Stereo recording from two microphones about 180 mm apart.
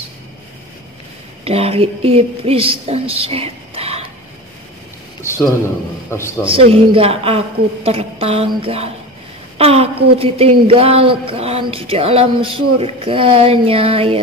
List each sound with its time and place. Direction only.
1.4 s a woman's voice: 35° right (ahead or behind)
6.0 s a man's voice: 15° left (ahead or behind)
6.5 s a woman's voice: 30° right (ahead or behind)